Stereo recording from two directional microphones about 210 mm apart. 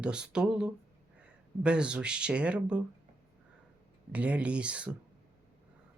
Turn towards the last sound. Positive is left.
turn(degrees=-5)  # may be behind; listen again after turning